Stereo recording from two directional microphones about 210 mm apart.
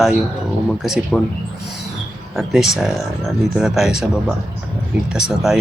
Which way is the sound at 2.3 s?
Centre (ahead or behind).